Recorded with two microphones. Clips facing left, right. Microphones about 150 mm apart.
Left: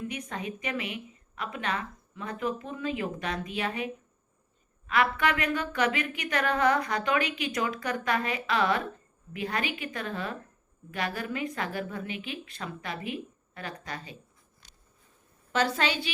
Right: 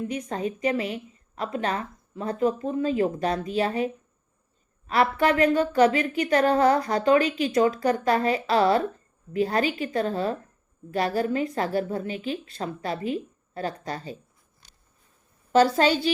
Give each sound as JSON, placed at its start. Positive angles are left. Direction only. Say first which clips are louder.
{"t": 0.0, "sound": "speech", "louder": "right 7 dB", "side_deg": -35}
{"t": 15.5, "sound": "speech", "louder": "right 8 dB", "side_deg": -35}